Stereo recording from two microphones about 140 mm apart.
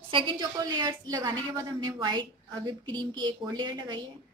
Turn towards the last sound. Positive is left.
turn(degrees=-35)  # may be behind; listen again after turning